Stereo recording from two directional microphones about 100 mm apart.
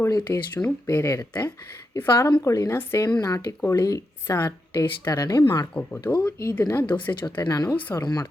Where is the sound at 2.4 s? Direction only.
35° left (ahead or behind).